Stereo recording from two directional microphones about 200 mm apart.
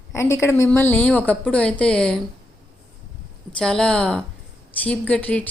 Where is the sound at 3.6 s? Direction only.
5° left (ahead or behind).